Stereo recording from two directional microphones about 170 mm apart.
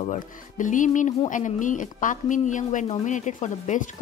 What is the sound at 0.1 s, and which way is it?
A woman's voice, 50° left (ahead or behind).